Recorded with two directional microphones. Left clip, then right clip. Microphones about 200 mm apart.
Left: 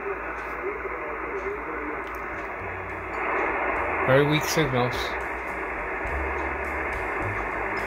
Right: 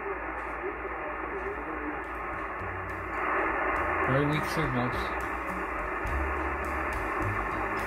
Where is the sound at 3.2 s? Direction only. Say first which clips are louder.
Left 3 dB; 25° right (ahead or behind).